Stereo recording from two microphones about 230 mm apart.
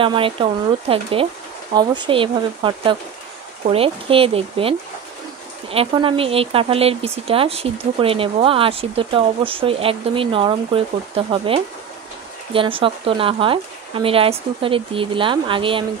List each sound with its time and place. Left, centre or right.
0.0 s speech: right